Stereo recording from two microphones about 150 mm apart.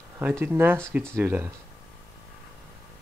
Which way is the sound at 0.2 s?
15° right (ahead or behind).